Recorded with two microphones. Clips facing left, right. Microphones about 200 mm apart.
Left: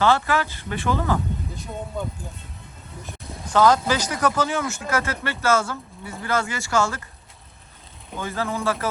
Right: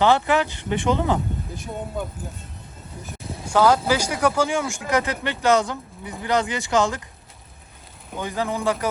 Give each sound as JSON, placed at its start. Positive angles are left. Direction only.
{"t": 0.0, "sound": "speech", "side_deg": -15}
{"t": 3.0, "sound": "speech", "side_deg": 0}
{"t": 8.2, "sound": "speech", "side_deg": -15}